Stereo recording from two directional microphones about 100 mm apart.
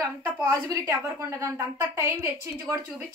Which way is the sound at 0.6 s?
30° right (ahead or behind).